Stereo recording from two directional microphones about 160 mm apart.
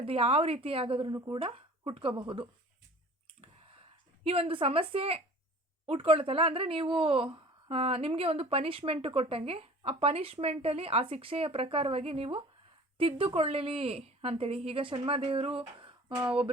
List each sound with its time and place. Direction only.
0.0 s speech: 40° right (ahead or behind)
1.1 s speech: 25° right (ahead or behind)
1.4 s speech: 35° right (ahead or behind)
4.2 s speech: 40° right (ahead or behind)